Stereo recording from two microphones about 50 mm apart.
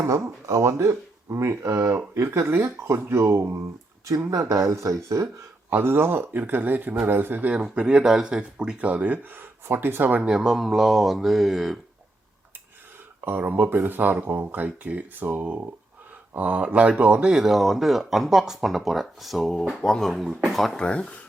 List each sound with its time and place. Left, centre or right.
0.0 s speech: right
4.2 s speech: right
5.7 s speech: right
7.5 s speech: centre
9.3 s speech: right
10.2 s speech: centre
13.2 s speech: right
17.3 s speech: centre
20.7 s speech: left